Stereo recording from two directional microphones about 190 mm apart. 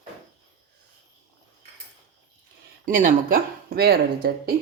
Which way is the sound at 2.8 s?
45° right (ahead or behind).